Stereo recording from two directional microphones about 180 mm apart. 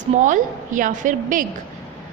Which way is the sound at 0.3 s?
45° right (ahead or behind).